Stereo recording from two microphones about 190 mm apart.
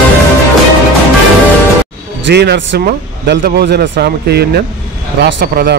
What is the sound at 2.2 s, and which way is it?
Speech, 60° right (ahead or behind).